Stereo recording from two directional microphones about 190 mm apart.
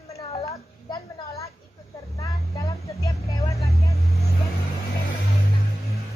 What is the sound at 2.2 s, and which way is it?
Vehicle, 15° left (ahead or behind).